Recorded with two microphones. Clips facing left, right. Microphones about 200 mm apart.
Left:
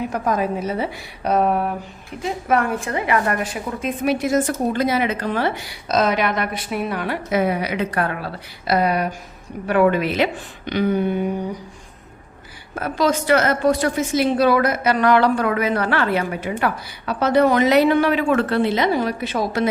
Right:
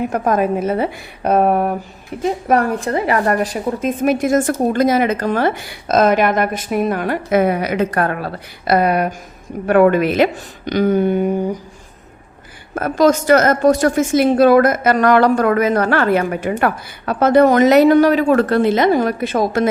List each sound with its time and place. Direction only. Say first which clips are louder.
0.0 s a woman's voice: right 5 dB; 50° right (ahead or behind)
2.2 s a woman's voice: right 4 dB; 40° right (ahead or behind)
12.7 s a woman's voice: right 6 dB; 45° right (ahead or behind)